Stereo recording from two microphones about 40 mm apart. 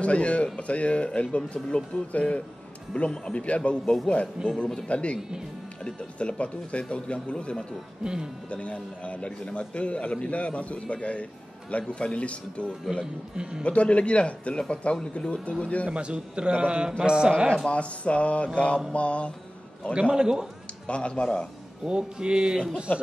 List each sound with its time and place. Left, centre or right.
0.0 s speech: left
4.4 s speech: centre
4.8 s a man's voice: left
8.0 s a man's voice: centre
8.5 s a man's voice: left
13.0 s a man's voice: right
13.7 s a man's voice: left
15.9 s a man's voice: right
17.6 s speech: left
19.9 s a man's voice: right
20.8 s a man's voice: left
21.8 s a man's voice: right
22.9 s speech: left